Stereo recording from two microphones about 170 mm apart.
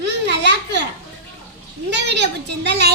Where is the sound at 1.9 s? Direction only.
90° right.